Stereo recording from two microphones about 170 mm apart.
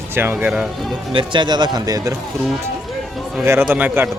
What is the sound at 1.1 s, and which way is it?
Speech, 30° right (ahead or behind).